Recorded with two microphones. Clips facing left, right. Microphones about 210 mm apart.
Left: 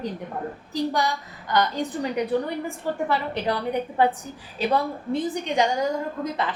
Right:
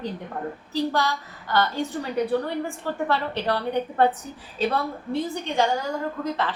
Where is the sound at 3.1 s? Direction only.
10° left (ahead or behind).